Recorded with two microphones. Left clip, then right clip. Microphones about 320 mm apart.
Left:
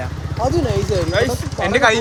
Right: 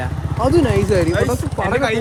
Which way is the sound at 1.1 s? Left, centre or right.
Left.